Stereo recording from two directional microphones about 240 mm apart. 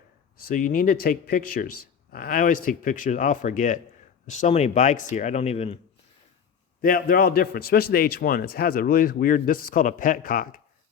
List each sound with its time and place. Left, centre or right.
0.4 s a man's voice: left
6.8 s a man's voice: left